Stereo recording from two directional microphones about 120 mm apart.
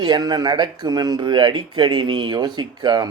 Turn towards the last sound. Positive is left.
turn(degrees=-35)  # may be behind; listen again after turning